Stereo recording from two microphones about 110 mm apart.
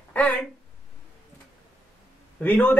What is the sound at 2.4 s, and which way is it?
Speech, 15° left (ahead or behind).